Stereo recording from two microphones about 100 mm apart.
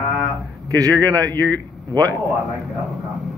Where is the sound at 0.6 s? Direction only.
40° right (ahead or behind).